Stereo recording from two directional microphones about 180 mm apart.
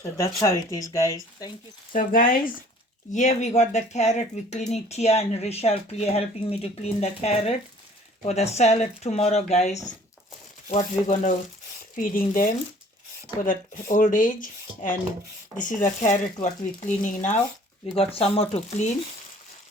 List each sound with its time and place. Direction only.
0.0 s speech: 15° left (ahead or behind)
1.9 s speech: 50° left (ahead or behind)
15.5 s speech: 45° left (ahead or behind)
17.9 s speech: 30° left (ahead or behind)